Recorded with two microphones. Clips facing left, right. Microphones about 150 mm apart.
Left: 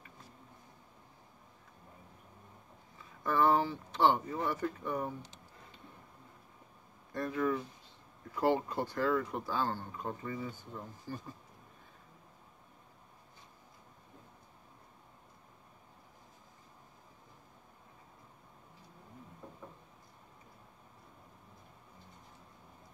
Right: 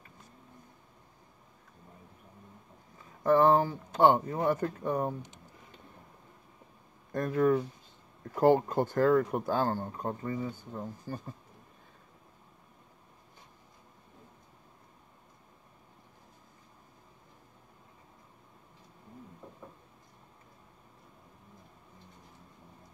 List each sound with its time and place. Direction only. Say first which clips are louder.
3.3 s speech: right 6 dB; 40° right (ahead or behind)
7.1 s speech: right 7 dB; 45° right (ahead or behind)